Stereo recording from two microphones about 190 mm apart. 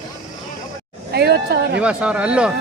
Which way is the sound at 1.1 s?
60° right (ahead or behind).